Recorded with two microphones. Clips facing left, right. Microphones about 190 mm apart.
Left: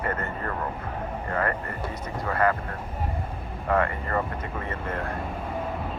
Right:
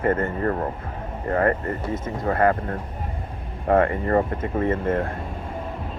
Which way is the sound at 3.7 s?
35° right (ahead or behind).